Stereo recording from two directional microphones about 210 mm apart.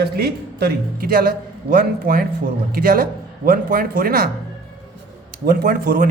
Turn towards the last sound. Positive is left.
turn(degrees=-45)  # may be behind; listen again after turning